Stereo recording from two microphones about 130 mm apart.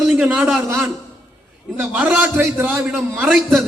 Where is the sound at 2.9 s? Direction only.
Centre (ahead or behind).